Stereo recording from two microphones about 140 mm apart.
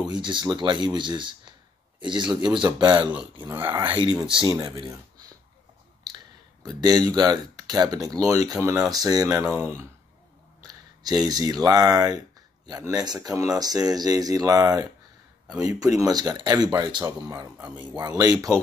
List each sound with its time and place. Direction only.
0.1 s speech: 35° right (ahead or behind)
3.4 s speech: 20° right (ahead or behind)
3.9 s speech: 30° right (ahead or behind)
7.1 s speech: 30° right (ahead or behind)
10.6 s a sound: 30° right (ahead or behind)
11.6 s speech: 30° right (ahead or behind)